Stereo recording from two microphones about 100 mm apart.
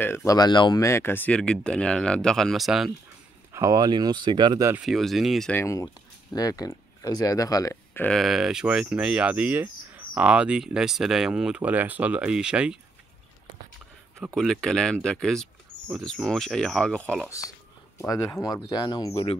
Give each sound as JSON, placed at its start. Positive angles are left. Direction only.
{"t": 0.0, "sound": "speech", "side_deg": 25}
{"t": 0.4, "sound": "speech", "side_deg": 50}
{"t": 0.7, "sound": "speech", "side_deg": 30}
{"t": 3.5, "sound": "speech", "side_deg": -35}
{"t": 4.8, "sound": "speech", "side_deg": 0}
{"t": 5.5, "sound": "speech", "side_deg": 30}
{"t": 6.3, "sound": "speech", "side_deg": 40}
{"t": 8.1, "sound": "speech", "side_deg": 0}
{"t": 14.3, "sound": "speech", "side_deg": 5}
{"t": 17.3, "sound": "speech", "side_deg": 35}